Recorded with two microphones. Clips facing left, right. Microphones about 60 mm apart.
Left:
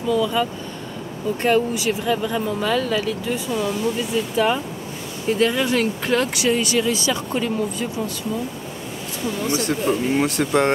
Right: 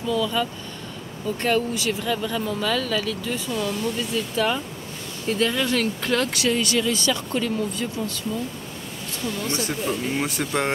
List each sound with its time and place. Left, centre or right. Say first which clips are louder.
0.1 s speech: left 4 dB; centre
3.4 s speech: left 3 dB; centre
9.2 s speech: left 4 dB; centre